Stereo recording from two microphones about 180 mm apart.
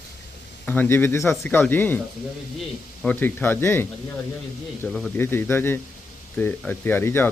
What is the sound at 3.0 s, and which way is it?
Speech, 10° left (ahead or behind).